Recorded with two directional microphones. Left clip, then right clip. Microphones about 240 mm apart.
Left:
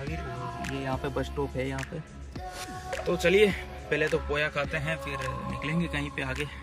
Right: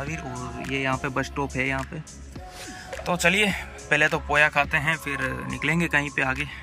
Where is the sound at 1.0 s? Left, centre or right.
Right.